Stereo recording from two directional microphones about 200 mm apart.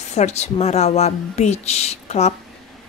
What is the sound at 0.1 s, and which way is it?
Speech, 35° left (ahead or behind).